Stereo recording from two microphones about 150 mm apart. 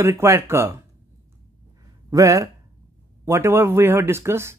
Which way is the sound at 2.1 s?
20° right (ahead or behind).